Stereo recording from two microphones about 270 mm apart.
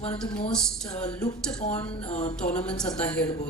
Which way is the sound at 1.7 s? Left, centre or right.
Centre.